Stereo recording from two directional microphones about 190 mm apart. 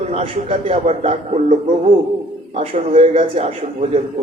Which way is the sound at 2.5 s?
30° right (ahead or behind).